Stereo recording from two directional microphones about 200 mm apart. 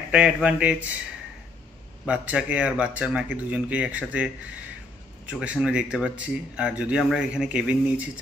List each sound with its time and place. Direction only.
0.1 s speech: 5° right (ahead or behind)
2.0 s speech: 5° right (ahead or behind)